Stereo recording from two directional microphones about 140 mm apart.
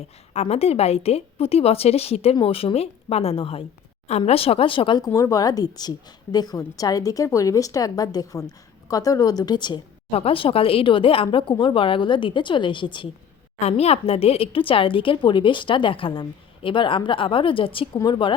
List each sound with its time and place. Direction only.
0.3 s a woman's voice: 50° left (ahead or behind)
13.6 s a woman's voice: 50° left (ahead or behind)